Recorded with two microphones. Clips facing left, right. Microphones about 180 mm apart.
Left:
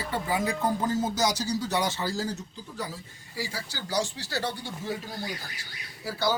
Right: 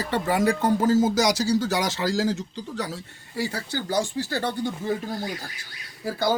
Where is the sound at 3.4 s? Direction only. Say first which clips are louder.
Right 7 dB; 60° right (ahead or behind).